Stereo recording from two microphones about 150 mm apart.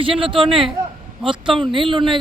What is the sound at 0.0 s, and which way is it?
Speech, 35° right (ahead or behind).